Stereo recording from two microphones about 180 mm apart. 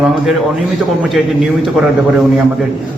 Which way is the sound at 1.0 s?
Centre (ahead or behind).